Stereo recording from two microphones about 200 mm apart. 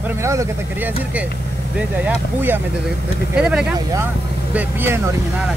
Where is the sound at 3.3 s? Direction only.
5° right (ahead or behind).